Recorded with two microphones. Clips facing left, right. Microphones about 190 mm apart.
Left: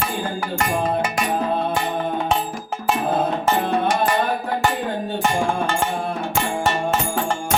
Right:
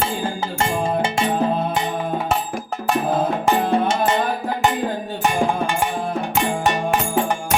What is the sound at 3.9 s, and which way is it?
Music, 25° right (ahead or behind).